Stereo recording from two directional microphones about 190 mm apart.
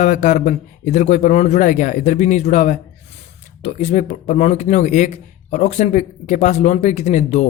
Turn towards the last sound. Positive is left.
turn(degrees=35)  # may be behind; listen again after turning